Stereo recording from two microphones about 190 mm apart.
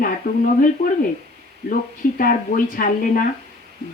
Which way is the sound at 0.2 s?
45° left (ahead or behind).